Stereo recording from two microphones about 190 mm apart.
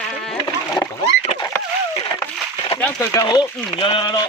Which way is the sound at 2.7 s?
10° left (ahead or behind).